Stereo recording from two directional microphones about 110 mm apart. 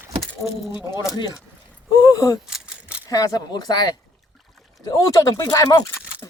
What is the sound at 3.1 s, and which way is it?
Speech, 35° left (ahead or behind).